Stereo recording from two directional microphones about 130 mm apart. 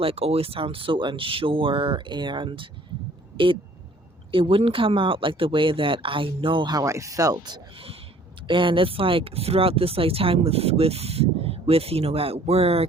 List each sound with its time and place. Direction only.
0.0 s speech: 50° right (ahead or behind); by 7.6 s 30° right (ahead or behind)
8.4 s speech: 40° right (ahead or behind)